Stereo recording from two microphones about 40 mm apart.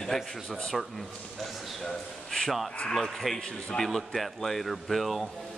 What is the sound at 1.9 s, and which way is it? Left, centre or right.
Speech, centre.